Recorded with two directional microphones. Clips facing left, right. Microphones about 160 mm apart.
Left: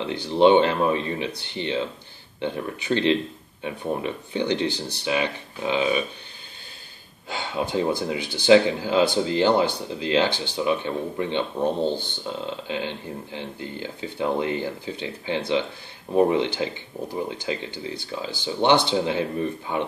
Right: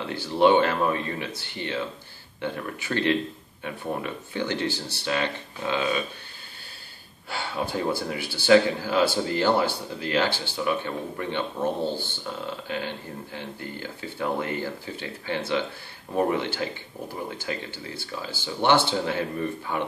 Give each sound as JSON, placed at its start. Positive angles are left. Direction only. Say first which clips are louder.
{"t": 0.0, "sound": "speech", "louder": "left 3 dB", "side_deg": 20}
{"t": 7.2, "sound": "speech", "louder": "left 2 dB", "side_deg": 20}